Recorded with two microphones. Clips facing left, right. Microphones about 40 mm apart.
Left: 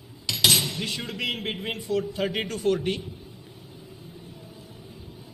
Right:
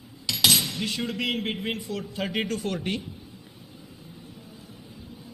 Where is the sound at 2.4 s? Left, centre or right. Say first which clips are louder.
Left 4 dB; left.